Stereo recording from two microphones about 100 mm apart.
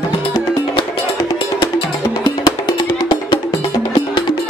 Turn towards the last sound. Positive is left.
turn(degrees=55)  # may be behind; listen again after turning